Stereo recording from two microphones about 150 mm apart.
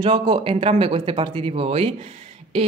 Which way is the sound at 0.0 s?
35° right (ahead or behind).